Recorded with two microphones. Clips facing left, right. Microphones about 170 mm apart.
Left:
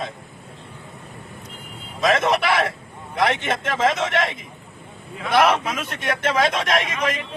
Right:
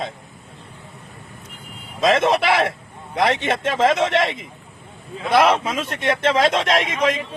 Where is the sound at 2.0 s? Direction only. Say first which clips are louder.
Right 2 dB; 25° right (ahead or behind).